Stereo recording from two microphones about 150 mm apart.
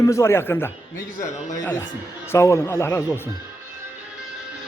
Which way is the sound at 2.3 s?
20° left (ahead or behind).